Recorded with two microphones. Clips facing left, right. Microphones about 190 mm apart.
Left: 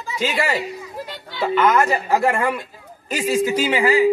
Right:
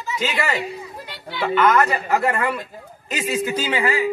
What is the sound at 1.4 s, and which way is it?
A man's voice, 5° left (ahead or behind).